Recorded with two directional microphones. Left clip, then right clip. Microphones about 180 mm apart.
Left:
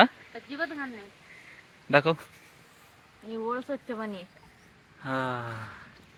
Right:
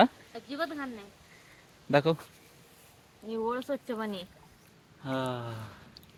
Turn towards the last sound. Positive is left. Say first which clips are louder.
# left 3 dB
turn(degrees=-5)  # may be behind; listen again after turning